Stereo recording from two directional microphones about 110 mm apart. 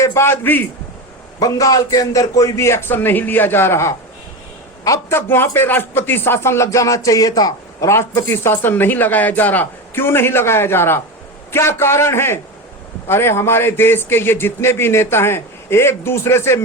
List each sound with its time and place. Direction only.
0.0 s a man's voice: 25° left (ahead or behind)
1.4 s a man's voice: 35° left (ahead or behind)